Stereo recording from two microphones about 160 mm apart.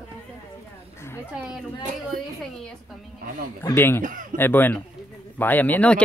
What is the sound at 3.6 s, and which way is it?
Speech, 15° left (ahead or behind).